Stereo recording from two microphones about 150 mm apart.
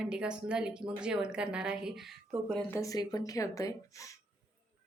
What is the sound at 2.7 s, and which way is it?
Speech, 20° left (ahead or behind).